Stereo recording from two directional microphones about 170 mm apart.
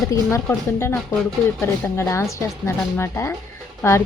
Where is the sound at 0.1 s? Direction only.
15° left (ahead or behind).